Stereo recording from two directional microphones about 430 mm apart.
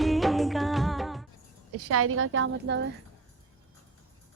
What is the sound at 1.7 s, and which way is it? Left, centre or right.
A woman's voice, right.